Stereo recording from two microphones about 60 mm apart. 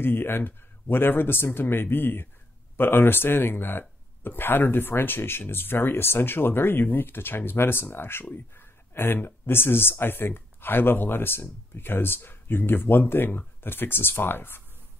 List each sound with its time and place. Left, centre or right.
0.0 s speech: left